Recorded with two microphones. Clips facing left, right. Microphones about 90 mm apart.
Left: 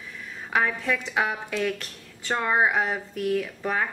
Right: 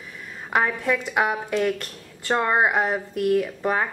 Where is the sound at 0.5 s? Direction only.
15° right (ahead or behind).